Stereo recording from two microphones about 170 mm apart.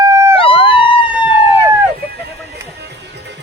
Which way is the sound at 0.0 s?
15° right (ahead or behind).